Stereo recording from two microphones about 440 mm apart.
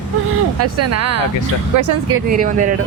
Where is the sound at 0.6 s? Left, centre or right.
Right.